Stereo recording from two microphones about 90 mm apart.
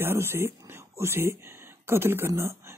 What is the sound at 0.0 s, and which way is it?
Speech, 25° right (ahead or behind).